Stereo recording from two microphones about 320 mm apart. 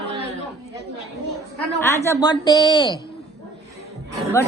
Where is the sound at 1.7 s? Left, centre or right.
Centre.